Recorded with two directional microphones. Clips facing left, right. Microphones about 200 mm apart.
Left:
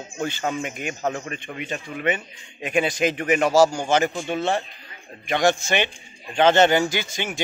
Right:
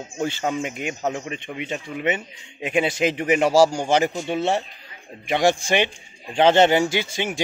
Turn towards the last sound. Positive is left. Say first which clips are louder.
# right 3 dB
turn(degrees=-30)  # may be behind; listen again after turning